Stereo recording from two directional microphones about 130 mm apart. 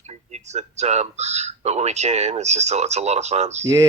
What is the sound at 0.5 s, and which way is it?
Speech, 60° right (ahead or behind).